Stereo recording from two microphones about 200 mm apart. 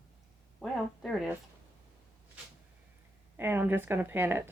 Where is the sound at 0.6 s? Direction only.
Centre (ahead or behind).